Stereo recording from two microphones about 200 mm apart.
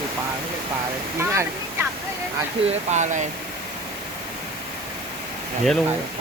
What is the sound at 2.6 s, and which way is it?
Speech, 35° right (ahead or behind).